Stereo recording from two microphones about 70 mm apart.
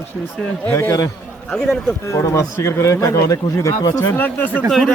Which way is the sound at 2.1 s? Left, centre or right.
Left.